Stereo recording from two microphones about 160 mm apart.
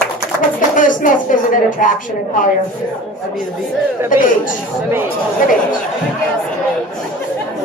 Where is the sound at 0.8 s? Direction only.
55° left (ahead or behind).